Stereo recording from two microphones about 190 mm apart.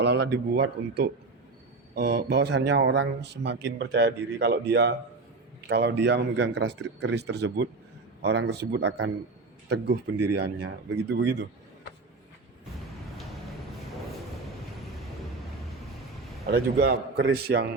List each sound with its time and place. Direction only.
0.0 s speech: 65° right (ahead or behind)
16.5 s speech: 55° right (ahead or behind)